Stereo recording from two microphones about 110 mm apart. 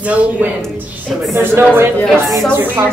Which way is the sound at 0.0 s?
10° right (ahead or behind).